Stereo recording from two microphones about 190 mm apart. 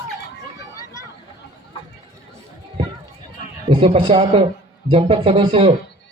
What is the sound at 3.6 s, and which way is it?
A man's voice, 30° right (ahead or behind).